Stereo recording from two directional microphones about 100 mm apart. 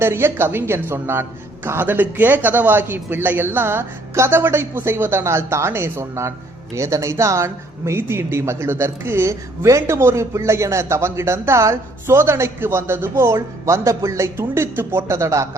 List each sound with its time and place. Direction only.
0.0 s a woman's voice: 25° right (ahead or behind)